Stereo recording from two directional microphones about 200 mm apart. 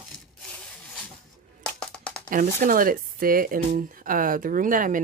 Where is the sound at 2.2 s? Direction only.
45° right (ahead or behind).